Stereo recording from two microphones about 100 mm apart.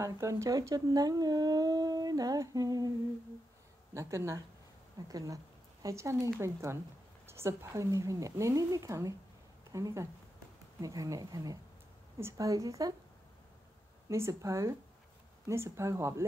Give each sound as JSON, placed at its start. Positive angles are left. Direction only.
{"t": 0.0, "sound": "speech", "side_deg": -30}
{"t": 3.9, "sound": "speech", "side_deg": -30}
{"t": 14.0, "sound": "speech", "side_deg": -30}